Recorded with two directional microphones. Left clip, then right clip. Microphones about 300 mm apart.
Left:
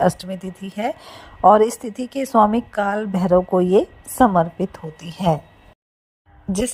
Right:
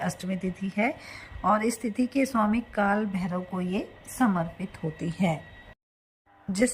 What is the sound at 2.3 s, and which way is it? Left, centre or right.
Speech, left.